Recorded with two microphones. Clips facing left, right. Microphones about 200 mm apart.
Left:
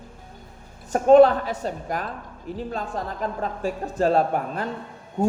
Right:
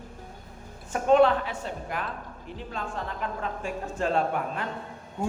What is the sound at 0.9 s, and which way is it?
A woman's voice, 40° left (ahead or behind).